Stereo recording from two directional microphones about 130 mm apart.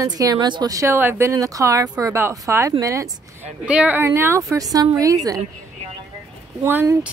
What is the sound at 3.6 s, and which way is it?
Speech, 10° right (ahead or behind).